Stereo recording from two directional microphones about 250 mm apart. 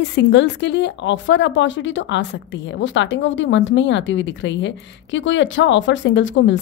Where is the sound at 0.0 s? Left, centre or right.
Left.